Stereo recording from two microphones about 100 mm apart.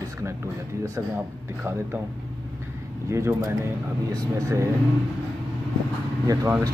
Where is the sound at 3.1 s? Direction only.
30° right (ahead or behind).